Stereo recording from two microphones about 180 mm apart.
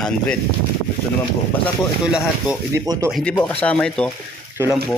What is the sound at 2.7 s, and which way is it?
Speech, 20° right (ahead or behind).